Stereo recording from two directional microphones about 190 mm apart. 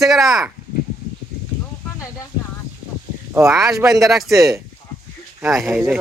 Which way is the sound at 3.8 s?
Centre (ahead or behind).